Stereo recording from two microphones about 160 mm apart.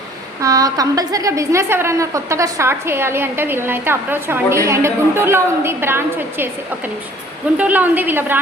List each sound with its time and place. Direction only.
0.4 s a woman's voice: 20° right (ahead or behind)